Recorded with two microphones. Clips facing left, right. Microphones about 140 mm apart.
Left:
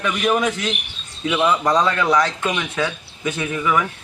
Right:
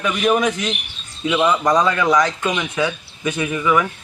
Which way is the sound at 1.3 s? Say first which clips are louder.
Right 1 dB; centre (ahead or behind).